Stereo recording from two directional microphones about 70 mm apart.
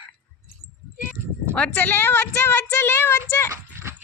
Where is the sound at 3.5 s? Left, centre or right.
Right.